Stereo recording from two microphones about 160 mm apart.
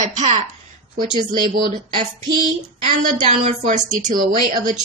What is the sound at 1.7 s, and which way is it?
Speech, 30° right (ahead or behind).